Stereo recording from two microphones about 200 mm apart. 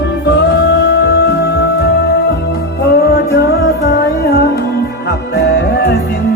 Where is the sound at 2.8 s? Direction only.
50° left (ahead or behind).